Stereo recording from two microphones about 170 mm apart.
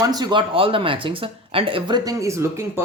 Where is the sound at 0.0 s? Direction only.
25° right (ahead or behind).